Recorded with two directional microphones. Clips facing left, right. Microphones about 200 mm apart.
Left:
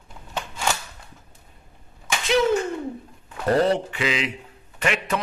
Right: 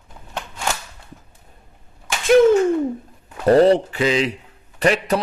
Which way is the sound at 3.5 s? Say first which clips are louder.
Right 7 dB; 35° right (ahead or behind).